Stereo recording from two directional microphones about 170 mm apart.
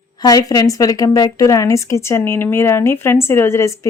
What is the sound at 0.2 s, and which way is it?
Speech, 20° left (ahead or behind).